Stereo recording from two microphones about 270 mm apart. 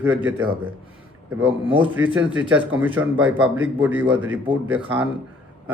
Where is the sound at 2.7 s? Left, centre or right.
Centre.